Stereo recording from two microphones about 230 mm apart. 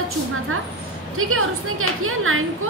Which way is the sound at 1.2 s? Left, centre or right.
Right.